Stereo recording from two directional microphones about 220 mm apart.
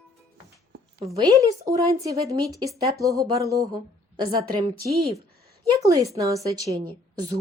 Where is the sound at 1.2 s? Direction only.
15° right (ahead or behind).